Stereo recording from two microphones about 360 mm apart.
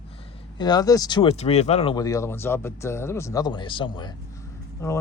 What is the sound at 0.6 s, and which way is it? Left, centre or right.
A man's voice, centre.